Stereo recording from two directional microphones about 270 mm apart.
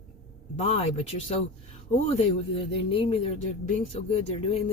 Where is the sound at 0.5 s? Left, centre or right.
Left.